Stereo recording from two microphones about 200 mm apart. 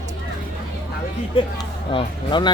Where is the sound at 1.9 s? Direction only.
25° left (ahead or behind).